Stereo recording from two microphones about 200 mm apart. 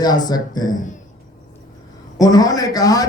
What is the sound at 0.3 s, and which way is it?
Speech, 20° left (ahead or behind).